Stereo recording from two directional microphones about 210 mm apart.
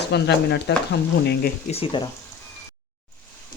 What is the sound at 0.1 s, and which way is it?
Speech, 55° left (ahead or behind).